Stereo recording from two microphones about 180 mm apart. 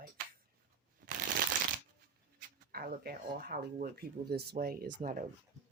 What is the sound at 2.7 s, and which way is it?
Speech, 55° right (ahead or behind).